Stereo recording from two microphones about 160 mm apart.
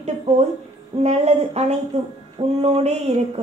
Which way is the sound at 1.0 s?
40° right (ahead or behind).